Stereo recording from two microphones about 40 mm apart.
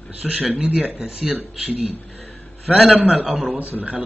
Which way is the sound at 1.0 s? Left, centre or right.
Right.